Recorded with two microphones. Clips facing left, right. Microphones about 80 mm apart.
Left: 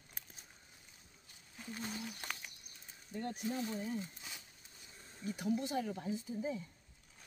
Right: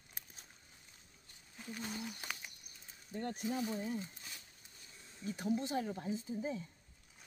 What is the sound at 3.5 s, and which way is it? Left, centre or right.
Speech, centre.